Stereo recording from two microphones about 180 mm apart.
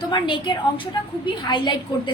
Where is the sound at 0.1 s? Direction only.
25° left (ahead or behind).